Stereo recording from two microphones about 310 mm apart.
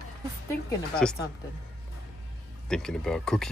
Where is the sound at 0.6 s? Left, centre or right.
Centre.